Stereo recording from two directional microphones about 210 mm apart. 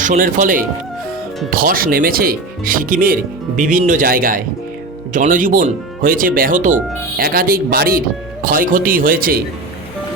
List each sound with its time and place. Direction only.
0.0 s speech: 40° right (ahead or behind)